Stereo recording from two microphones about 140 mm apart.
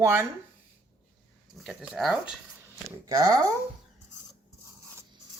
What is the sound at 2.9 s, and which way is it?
Speech, 25° right (ahead or behind).